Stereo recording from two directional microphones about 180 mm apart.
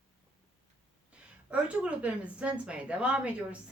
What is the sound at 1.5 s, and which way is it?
A woman's voice, 5° right (ahead or behind).